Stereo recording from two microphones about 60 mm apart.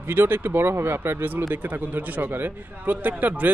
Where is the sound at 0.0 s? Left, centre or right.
Right.